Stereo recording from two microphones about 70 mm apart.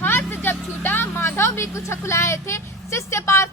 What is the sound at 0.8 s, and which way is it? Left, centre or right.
A woman's voice, left.